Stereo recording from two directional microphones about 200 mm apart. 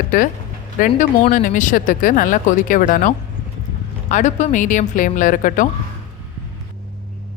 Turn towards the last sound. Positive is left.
turn(degrees=40)  # may be behind; listen again after turning